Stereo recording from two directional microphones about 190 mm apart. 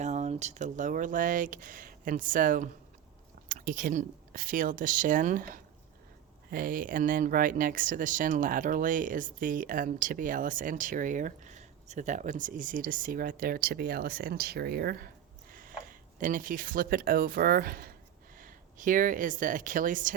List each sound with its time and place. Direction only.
0.0 s speech: 40° right (ahead or behind)